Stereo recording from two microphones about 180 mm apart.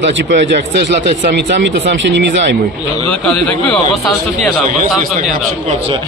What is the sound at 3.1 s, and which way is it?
Speech, 5° left (ahead or behind).